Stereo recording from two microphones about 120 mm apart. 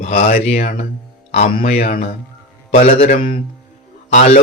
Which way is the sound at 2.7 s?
75° left (ahead or behind).